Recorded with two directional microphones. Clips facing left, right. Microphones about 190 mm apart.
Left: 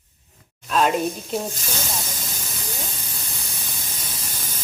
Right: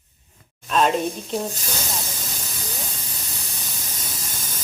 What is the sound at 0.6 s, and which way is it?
Speech, 5° left (ahead or behind).